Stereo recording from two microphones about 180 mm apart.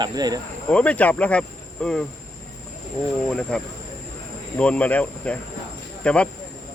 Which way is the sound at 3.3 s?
5° left (ahead or behind).